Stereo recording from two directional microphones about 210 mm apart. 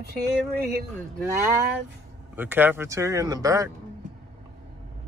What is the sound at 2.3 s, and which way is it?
Speech, 10° right (ahead or behind).